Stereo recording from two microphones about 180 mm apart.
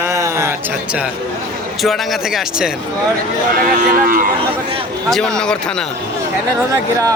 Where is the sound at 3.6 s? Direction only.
50° right (ahead or behind).